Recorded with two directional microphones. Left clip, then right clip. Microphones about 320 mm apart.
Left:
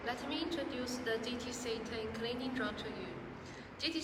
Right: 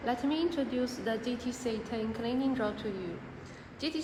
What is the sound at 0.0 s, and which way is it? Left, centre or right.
A woman's voice, right.